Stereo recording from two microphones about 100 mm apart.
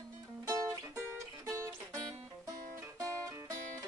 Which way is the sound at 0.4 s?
30° right (ahead or behind).